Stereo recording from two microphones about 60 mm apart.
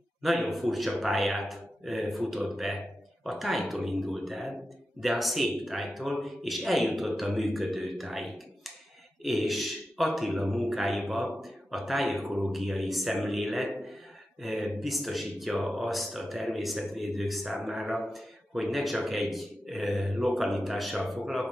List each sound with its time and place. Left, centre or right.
0.2 s a man's voice: centre